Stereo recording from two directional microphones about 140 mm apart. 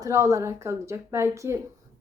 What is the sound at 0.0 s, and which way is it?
Speech, 25° right (ahead or behind).